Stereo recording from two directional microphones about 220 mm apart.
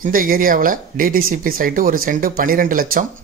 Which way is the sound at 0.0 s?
40° right (ahead or behind).